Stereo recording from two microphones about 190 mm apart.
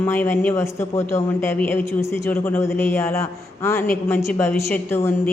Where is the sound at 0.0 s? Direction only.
10° left (ahead or behind).